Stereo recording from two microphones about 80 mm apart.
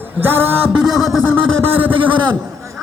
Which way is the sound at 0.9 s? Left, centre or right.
Centre.